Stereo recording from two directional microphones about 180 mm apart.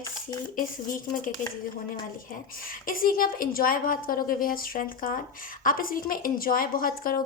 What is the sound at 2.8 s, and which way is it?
A woman's voice, 50° left (ahead or behind).